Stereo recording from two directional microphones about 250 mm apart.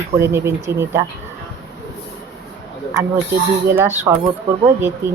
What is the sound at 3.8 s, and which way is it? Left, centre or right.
Speech, centre.